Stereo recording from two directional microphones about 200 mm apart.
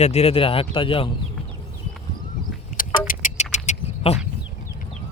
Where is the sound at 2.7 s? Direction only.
40° left (ahead or behind).